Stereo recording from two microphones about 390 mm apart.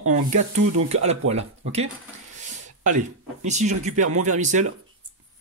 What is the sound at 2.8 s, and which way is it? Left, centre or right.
Speech, centre.